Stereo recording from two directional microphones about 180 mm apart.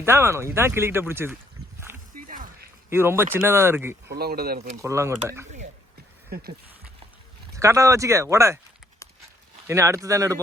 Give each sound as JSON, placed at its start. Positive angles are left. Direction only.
{"t": 0.0, "sound": "speech", "side_deg": -15}
{"t": 2.1, "sound": "dog", "side_deg": -50}
{"t": 2.9, "sound": "speech", "side_deg": -15}
{"t": 4.1, "sound": "speech", "side_deg": -60}
{"t": 4.8, "sound": "speech", "side_deg": -15}
{"t": 7.5, "sound": "speech", "side_deg": -15}
{"t": 9.6, "sound": "speech", "side_deg": -15}